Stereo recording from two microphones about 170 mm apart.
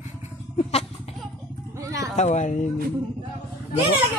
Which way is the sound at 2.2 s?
45° left (ahead or behind).